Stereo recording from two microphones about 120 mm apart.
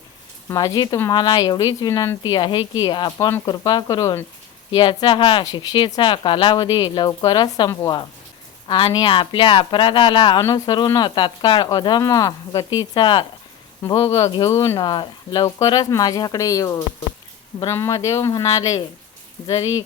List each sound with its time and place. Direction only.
0.4 s a woman's voice: 30° left (ahead or behind)
2.3 s a woman's voice: 40° left (ahead or behind)
8.6 s a woman's voice: 40° left (ahead or behind)
13.8 s speech: 25° left (ahead or behind)
14.8 s a woman's voice: 40° left (ahead or behind)